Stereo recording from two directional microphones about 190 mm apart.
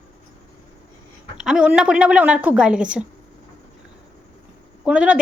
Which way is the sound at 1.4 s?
5° right (ahead or behind).